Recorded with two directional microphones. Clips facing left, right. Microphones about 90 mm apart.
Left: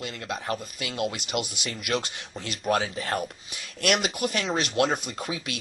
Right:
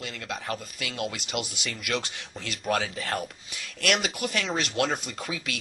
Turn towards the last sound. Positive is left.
turn(degrees=25)  # may be behind; listen again after turning